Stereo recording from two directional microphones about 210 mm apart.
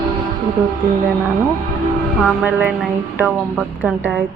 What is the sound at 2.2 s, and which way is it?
Speech, 10° right (ahead or behind).